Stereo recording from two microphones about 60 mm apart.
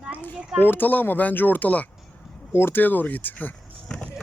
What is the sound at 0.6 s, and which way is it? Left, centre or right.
Speech, left.